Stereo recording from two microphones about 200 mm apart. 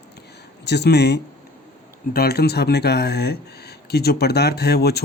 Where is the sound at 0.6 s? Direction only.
55° left (ahead or behind).